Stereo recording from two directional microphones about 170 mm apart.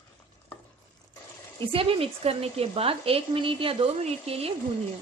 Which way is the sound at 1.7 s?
35° right (ahead or behind).